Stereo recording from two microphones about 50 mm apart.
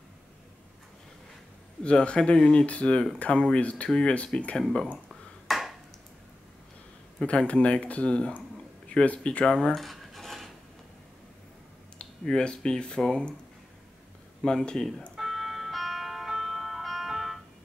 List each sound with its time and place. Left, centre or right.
1.8 s speech: centre
5.5 s a sound: centre
7.2 s speech: left
9.8 s cutlery: centre
12.0 s speech: centre
14.4 s speech: centre
15.1 s music: centre